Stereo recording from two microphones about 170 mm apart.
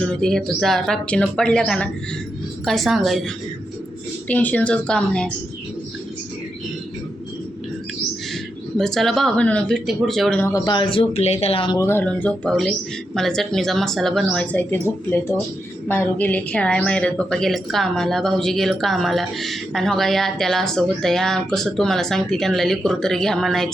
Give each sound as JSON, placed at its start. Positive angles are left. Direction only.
{"t": 0.0, "sound": "a woman's voice", "side_deg": 5}
{"t": 8.8, "sound": "speech", "side_deg": 0}
{"t": 10.5, "sound": "speech", "side_deg": 25}
{"t": 11.8, "sound": "a woman's voice", "side_deg": 15}
{"t": 15.9, "sound": "speech", "side_deg": 10}